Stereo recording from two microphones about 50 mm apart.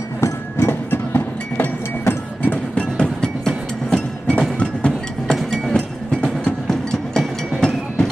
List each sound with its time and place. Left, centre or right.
0.2 s music: left
2.8 s music: centre
5.3 s music: centre
5.7 s music: centre